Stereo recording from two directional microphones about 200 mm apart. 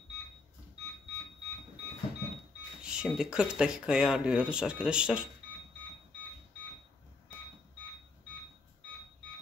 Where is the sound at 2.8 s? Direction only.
5° right (ahead or behind).